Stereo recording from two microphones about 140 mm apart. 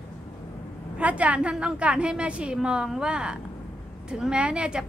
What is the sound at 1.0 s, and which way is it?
A woman's voice, 10° right (ahead or behind).